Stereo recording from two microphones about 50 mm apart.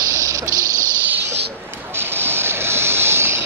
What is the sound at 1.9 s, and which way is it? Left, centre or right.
Vehicle, right.